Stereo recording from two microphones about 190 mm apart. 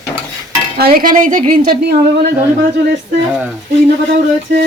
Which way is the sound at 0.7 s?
50° right (ahead or behind).